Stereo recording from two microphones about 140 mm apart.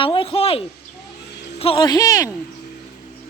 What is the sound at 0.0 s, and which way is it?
Speech, 40° left (ahead or behind).